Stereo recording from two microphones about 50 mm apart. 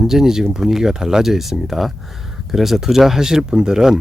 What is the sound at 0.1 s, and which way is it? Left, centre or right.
Speech, centre.